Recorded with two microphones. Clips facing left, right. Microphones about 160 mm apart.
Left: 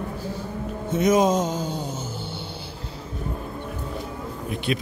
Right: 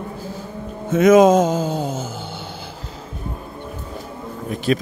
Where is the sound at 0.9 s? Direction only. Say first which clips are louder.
Right 8 dB; 90° right.